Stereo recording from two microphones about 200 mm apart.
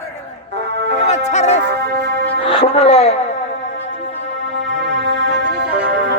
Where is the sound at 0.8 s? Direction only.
60° right (ahead or behind).